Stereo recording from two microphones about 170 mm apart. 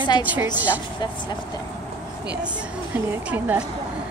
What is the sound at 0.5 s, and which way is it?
Speech, 10° right (ahead or behind).